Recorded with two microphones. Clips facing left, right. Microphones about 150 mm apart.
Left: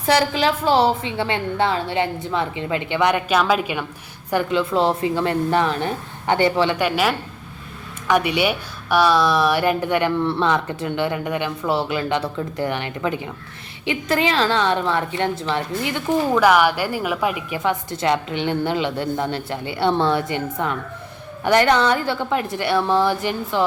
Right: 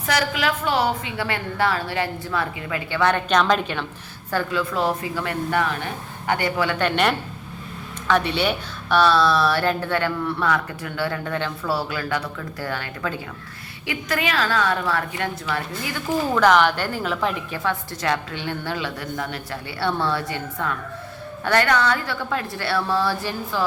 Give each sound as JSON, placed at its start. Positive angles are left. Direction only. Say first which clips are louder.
{"t": 0.0, "sound": "a woman's voice", "louder": "left 5 dB", "side_deg": 30}
{"t": 6.7, "sound": "speech", "louder": "left 1 dB", "side_deg": 5}
{"t": 10.2, "sound": "a woman's voice", "louder": "left 3 dB", "side_deg": 25}
{"t": 16.3, "sound": "a woman's voice", "louder": "even", "side_deg": 10}